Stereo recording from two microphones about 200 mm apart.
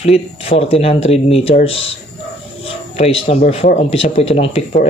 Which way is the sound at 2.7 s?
30° left (ahead or behind).